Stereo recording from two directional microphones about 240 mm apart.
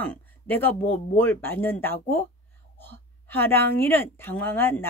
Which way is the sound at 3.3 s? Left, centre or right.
Centre.